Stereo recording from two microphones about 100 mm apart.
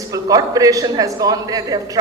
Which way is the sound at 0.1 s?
35° right (ahead or behind).